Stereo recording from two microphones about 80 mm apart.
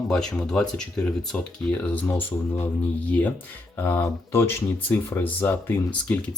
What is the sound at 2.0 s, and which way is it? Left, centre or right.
Speech, left.